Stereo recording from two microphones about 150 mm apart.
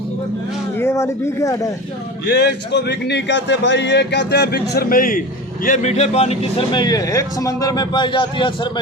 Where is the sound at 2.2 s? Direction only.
90° left.